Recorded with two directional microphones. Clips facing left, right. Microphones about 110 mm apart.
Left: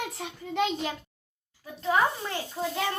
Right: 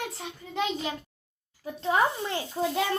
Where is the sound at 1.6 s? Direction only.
30° right (ahead or behind).